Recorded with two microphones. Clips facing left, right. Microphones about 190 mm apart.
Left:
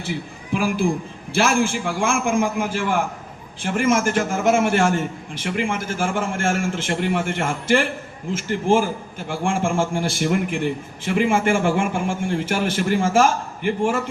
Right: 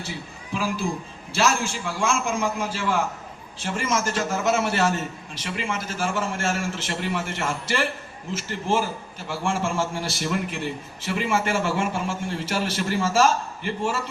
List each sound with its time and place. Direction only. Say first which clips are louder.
0.5 s a child's voice: left 6 dB; 55° left (ahead or behind)